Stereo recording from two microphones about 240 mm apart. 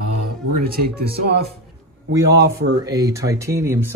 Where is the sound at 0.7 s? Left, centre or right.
Right.